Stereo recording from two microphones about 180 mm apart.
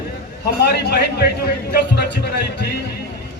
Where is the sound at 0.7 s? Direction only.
60° left (ahead or behind).